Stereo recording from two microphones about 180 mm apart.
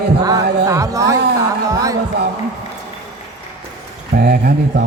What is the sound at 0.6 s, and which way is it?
Speech, 15° right (ahead or behind).